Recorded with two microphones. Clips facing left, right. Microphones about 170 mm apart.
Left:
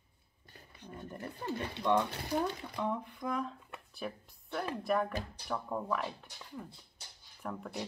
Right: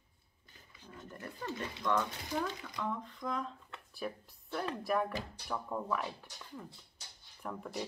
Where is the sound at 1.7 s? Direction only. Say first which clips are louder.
Left 4 dB; 30° left (ahead or behind).